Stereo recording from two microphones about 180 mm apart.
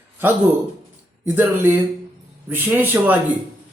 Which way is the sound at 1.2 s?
10° right (ahead or behind).